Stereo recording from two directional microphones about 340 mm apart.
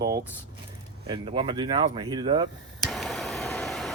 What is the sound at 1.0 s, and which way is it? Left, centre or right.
Speech, centre.